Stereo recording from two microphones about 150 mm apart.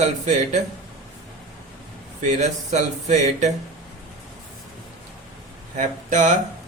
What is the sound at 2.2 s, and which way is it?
Speech, 55° right (ahead or behind).